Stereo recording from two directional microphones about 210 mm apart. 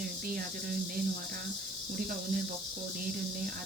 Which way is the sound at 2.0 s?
40° right (ahead or behind).